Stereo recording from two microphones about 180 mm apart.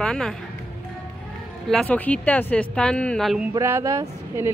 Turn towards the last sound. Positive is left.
turn(degrees=-15)  # may be behind; listen again after turning